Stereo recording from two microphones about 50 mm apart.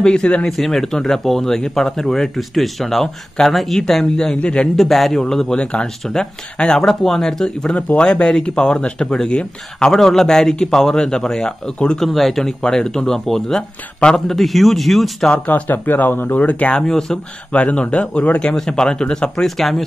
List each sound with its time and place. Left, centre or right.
0.0 s speech: centre
0.5 s speech: centre
4.4 s speech: left
4.7 s speech: centre
9.9 s speech: centre
12.0 s speech: centre
15.3 s a man's voice: left
16.3 s speech: left
16.7 s speech: centre
17.5 s speech: left
18.4 s speech: centre
19.4 s speech: centre